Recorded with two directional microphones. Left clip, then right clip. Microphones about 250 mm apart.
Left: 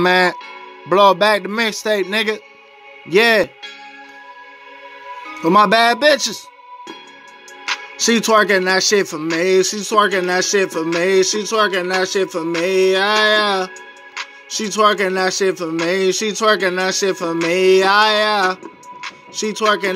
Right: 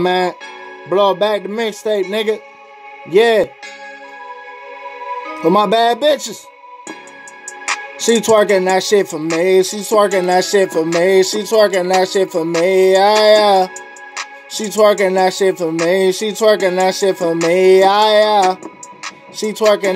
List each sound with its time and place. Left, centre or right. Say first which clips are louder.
0.0 s a man's voice: left 2 dB; centre
5.6 s a man's voice: left 2 dB; centre
8.0 s music: right 2 dB; centre